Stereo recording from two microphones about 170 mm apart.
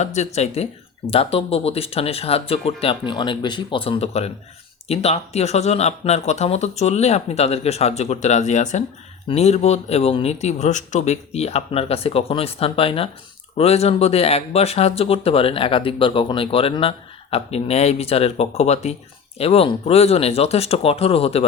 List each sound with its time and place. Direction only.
0.0 s speech: 40° left (ahead or behind)